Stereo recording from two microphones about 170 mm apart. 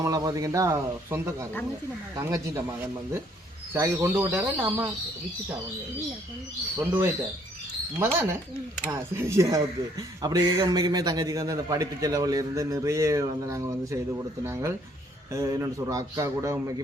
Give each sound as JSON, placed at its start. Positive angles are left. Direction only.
{"t": 0.0, "sound": "a man's voice", "side_deg": -20}
{"t": 6.7, "sound": "a man's voice", "side_deg": -10}